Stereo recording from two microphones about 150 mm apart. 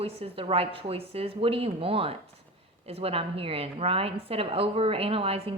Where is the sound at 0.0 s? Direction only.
40° right (ahead or behind).